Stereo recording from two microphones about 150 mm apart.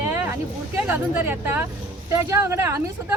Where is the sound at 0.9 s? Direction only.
10° right (ahead or behind).